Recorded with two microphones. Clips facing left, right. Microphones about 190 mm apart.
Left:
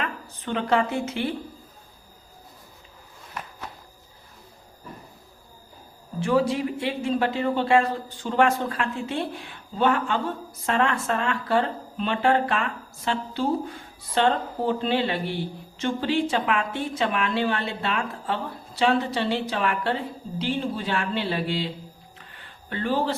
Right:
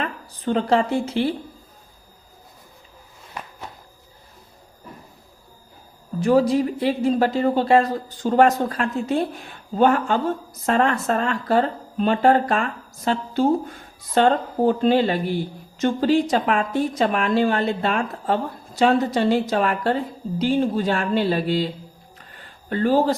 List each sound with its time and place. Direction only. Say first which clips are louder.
0.0 s speech: right 5 dB; 35° right (ahead or behind)
6.1 s speech: right 5 dB; 40° right (ahead or behind)
22.2 s a sound: right 2 dB; 40° right (ahead or behind)